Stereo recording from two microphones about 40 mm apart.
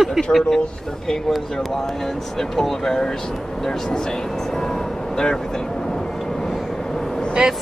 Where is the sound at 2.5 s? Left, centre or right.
Centre.